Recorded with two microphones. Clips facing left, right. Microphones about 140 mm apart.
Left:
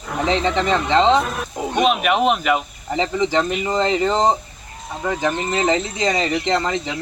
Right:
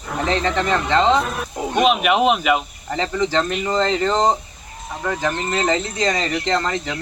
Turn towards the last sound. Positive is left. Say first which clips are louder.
# left 1 dB
turn(degrees=15)  # may be behind; listen again after turning